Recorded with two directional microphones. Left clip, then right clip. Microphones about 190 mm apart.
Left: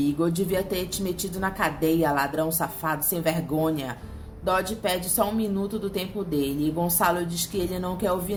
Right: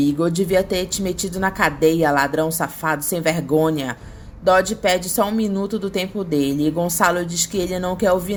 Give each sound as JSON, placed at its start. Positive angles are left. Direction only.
{"t": 0.0, "sound": "a woman's voice", "side_deg": -35}